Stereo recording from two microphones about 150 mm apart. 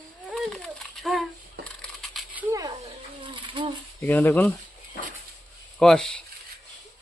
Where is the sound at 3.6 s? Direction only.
35° right (ahead or behind).